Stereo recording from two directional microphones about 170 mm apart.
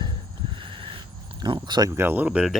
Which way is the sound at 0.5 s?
30° right (ahead or behind).